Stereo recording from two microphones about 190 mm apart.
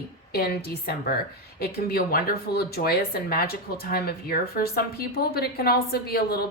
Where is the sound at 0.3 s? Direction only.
55° left (ahead or behind).